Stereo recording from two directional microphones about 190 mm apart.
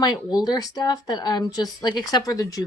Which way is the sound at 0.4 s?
20° left (ahead or behind).